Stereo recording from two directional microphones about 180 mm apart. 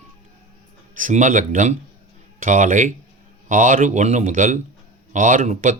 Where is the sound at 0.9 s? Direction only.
45° right (ahead or behind).